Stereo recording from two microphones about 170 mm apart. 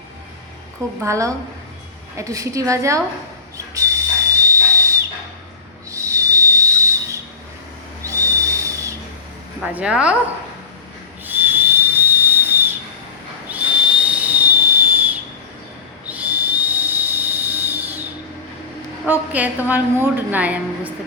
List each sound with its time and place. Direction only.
1.0 s a woman's voice: 15° right (ahead or behind)
3.8 s whistle: 20° right (ahead or behind)
6.1 s whistle: 20° right (ahead or behind)
8.0 s owl: 20° right (ahead or behind)
9.7 s a woman's voice: 5° right (ahead or behind)
11.3 s whistle: 10° right (ahead or behind)
19.0 s a woman's voice: 10° right (ahead or behind)